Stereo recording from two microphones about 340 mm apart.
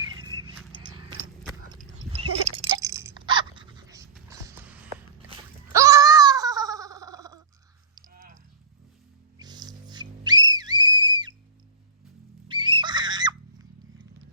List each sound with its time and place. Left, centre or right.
0.3 s horse: centre
1.7 s a sound: centre
2.7 s dog: centre
5.7 s a sound: centre
9.4 s music: centre
12.5 s screaming: centre